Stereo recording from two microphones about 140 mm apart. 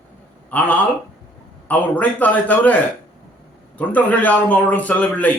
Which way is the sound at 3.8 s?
10° left (ahead or behind).